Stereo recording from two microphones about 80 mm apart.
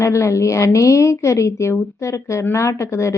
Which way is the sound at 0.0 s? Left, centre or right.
Left.